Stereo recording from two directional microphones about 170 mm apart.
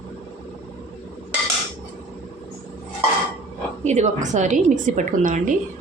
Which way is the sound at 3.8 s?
40° right (ahead or behind).